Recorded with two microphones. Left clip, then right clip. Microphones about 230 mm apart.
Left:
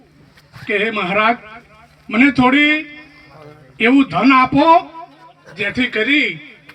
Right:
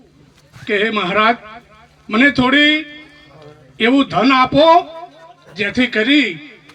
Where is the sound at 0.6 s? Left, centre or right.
Right.